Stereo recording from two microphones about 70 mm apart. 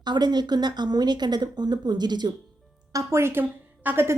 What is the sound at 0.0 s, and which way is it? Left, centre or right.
Speech, right.